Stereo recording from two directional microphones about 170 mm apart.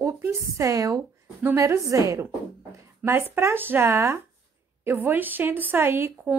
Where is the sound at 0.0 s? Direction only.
15° right (ahead or behind).